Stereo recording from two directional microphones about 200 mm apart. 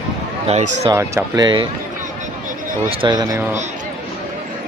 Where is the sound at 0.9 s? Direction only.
15° right (ahead or behind).